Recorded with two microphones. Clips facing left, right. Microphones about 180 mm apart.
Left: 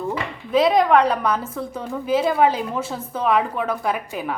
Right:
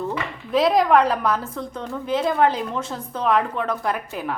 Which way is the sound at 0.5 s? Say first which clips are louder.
Left 1 dB; centre (ahead or behind).